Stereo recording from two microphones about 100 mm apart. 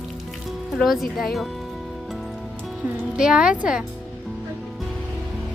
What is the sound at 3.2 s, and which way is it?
Speech, 5° right (ahead or behind).